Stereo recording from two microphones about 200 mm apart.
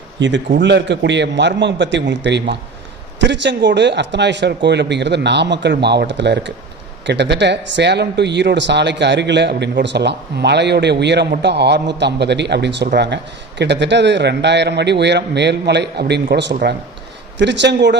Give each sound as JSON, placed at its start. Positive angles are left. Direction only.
{"t": 0.2, "sound": "speech", "side_deg": -65}